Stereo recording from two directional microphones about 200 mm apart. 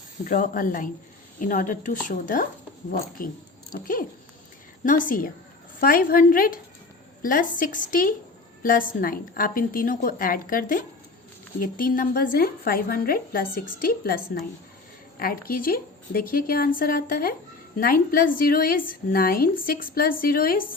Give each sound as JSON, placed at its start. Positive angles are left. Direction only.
{"t": 0.3, "sound": "a woman's voice", "side_deg": 40}